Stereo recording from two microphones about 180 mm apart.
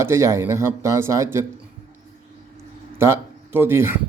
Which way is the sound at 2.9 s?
15° right (ahead or behind).